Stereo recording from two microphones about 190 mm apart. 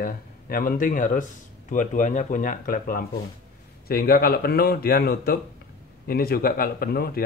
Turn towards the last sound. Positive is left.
turn(degrees=55)  # may be behind; listen again after turning